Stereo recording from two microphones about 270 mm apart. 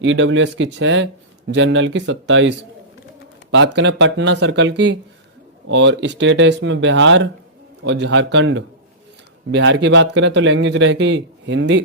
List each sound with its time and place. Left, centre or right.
0.0 s speech: right